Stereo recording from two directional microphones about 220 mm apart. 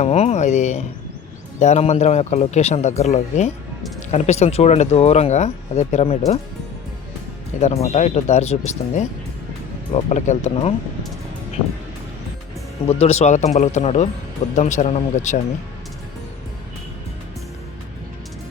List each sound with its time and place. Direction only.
0.0 s a man's voice: 30° left (ahead or behind)
7.6 s a man's voice: 30° left (ahead or behind)
12.9 s a man's voice: 30° left (ahead or behind)